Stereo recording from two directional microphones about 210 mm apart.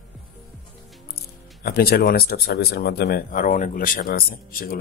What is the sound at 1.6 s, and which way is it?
Speech, 45° left (ahead or behind).